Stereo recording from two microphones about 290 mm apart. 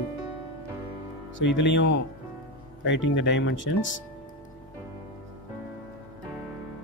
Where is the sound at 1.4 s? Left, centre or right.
Left.